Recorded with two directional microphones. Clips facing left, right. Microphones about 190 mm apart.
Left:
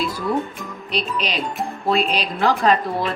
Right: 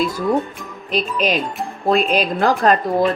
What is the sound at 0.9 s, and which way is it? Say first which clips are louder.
Speech: right 5 dB; 50° right (ahead or behind).